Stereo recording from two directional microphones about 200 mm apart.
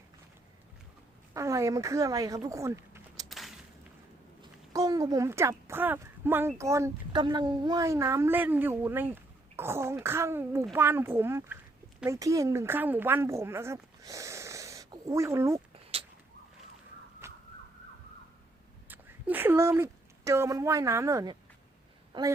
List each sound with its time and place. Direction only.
1.3 s speech: 15° right (ahead or behind)
3.2 s a sound: centre (ahead or behind)
4.7 s speech: 15° right (ahead or behind)
15.9 s a sound: 30° right (ahead or behind)
17.2 s emergency vehicle: 15° right (ahead or behind)
18.9 s a woman's voice: 10° right (ahead or behind)